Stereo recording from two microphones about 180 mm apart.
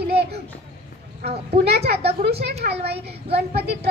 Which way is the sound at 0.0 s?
65° right (ahead or behind).